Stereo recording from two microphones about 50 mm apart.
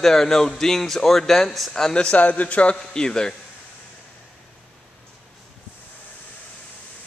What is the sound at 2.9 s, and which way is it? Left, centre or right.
Speech, centre.